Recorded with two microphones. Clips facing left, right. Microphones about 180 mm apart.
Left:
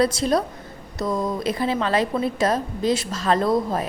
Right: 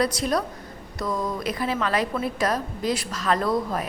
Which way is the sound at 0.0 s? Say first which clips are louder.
Left 4 dB; 30° left (ahead or behind).